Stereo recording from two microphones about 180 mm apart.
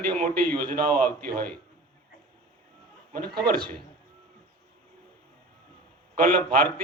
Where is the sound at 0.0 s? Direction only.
55° right (ahead or behind).